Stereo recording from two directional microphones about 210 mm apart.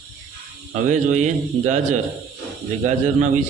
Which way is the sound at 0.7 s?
35° right (ahead or behind).